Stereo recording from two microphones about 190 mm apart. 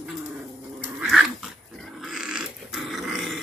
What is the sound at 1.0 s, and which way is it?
Dog, centre (ahead or behind).